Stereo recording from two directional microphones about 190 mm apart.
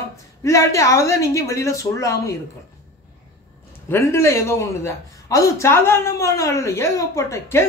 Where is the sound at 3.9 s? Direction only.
15° left (ahead or behind).